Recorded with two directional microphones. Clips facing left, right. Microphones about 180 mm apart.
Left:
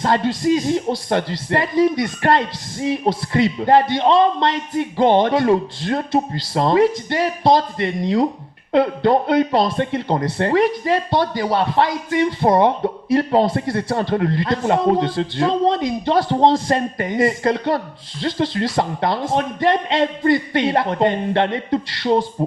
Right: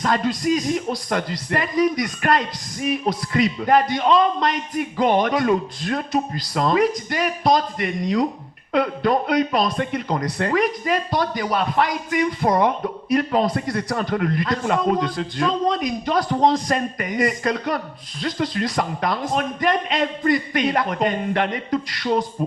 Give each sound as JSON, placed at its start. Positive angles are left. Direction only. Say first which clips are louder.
{"t": 0.0, "sound": "speech", "louder": "left 3 dB", "side_deg": 25}